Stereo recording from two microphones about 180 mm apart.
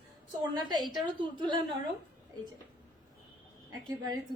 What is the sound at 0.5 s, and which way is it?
Speech, 25° right (ahead or behind).